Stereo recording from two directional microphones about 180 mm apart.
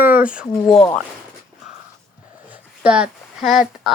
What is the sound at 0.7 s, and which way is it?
Speech, 25° left (ahead or behind).